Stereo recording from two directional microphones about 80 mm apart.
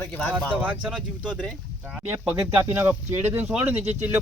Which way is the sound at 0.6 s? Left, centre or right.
Centre.